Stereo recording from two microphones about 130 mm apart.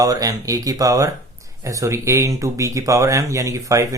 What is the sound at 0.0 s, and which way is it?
Speech, 25° right (ahead or behind).